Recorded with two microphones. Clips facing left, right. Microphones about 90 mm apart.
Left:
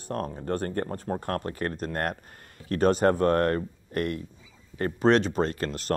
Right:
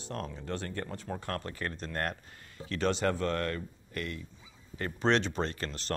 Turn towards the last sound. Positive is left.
turn(degrees=45)  # may be behind; listen again after turning